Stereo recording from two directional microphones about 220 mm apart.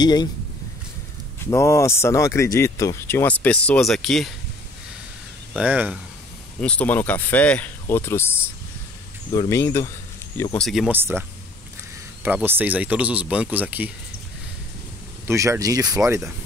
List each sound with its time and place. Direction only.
0.0 s speech: 20° left (ahead or behind)
1.5 s speech: 15° left (ahead or behind)
5.5 s speech: 5° right (ahead or behind)
6.6 s speech: 5° left (ahead or behind); by 11.2 s 10° right (ahead or behind)
12.3 s speech: 10° right (ahead or behind)
15.2 s speech: 10° right (ahead or behind)